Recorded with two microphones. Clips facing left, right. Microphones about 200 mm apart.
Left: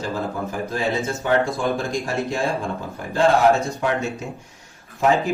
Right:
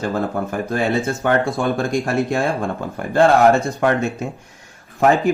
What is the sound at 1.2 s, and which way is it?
Speech, 60° right (ahead or behind).